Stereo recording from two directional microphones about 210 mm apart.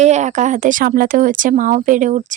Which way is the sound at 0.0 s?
35° right (ahead or behind).